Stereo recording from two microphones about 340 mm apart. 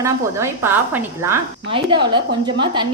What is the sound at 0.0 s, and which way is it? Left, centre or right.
A woman's voice, centre.